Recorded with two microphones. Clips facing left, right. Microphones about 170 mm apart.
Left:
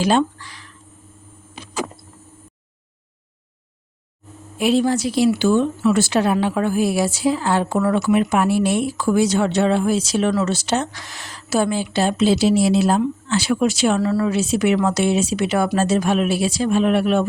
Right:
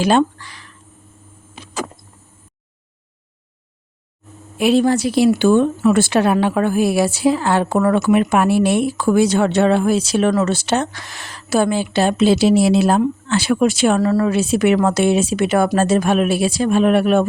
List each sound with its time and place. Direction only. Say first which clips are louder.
0.0 s a woman's voice: right 3 dB; 60° right (ahead or behind)
4.6 s a woman's voice: right 3 dB; 65° right (ahead or behind)